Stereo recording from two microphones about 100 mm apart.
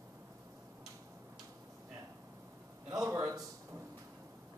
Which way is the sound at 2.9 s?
35° right (ahead or behind).